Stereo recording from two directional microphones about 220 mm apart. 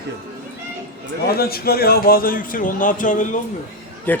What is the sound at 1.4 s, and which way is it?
Speech, 45° left (ahead or behind).